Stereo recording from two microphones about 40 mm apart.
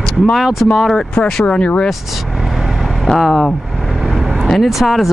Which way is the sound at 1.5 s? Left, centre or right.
Left.